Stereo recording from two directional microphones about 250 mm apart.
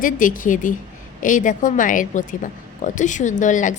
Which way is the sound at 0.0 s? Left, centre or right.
Left.